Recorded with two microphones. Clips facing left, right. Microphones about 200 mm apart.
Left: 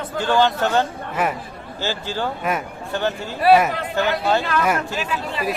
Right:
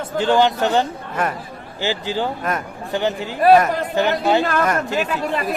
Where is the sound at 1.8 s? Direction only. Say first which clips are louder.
Right 3 dB; 15° right (ahead or behind).